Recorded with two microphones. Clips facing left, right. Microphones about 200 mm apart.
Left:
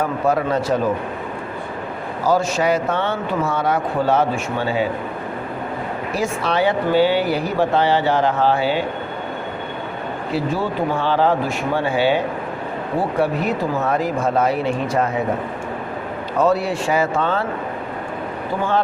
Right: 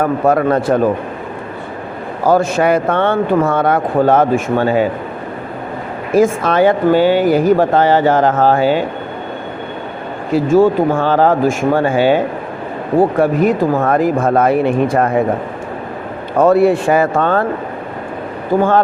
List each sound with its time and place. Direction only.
0.0 s speech: 55° right (ahead or behind)
2.2 s speech: 55° right (ahead or behind)
6.1 s speech: 50° right (ahead or behind)
10.3 s speech: 45° right (ahead or behind)
16.4 s speech: 55° right (ahead or behind)
18.5 s speech: 50° right (ahead or behind)